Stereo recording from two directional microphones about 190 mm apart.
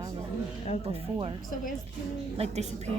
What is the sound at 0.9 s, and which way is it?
Speech, 30° right (ahead or behind).